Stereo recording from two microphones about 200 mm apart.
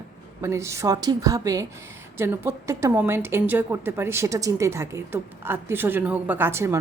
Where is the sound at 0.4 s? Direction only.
15° right (ahead or behind).